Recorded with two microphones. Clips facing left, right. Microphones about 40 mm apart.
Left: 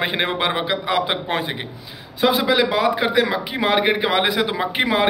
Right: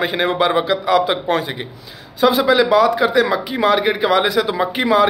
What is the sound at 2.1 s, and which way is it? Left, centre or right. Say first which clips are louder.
A man's voice: right 4 dB; centre.